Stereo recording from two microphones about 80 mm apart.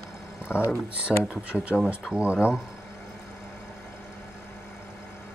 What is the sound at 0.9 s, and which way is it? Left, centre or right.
Speech, centre.